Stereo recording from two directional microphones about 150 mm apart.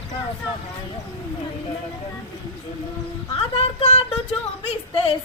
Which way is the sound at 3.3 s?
40° left (ahead or behind).